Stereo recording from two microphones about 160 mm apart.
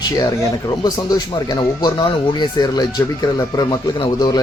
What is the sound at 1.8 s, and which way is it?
Speech, 25° left (ahead or behind).